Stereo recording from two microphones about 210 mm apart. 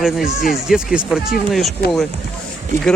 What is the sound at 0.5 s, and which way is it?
Speech, centre (ahead or behind).